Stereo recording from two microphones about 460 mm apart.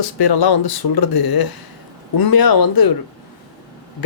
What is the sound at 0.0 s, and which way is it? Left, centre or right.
Speech, left.